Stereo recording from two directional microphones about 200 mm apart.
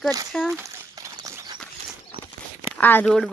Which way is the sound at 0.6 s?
15° right (ahead or behind).